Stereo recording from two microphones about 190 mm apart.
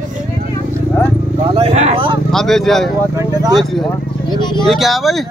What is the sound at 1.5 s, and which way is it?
Speech, 30° right (ahead or behind).